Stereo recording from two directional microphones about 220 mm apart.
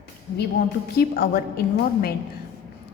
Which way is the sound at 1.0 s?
45° left (ahead or behind).